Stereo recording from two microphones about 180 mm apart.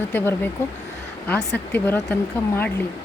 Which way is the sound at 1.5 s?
10° left (ahead or behind).